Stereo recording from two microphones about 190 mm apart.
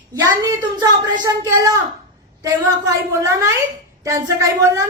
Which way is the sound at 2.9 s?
15° right (ahead or behind).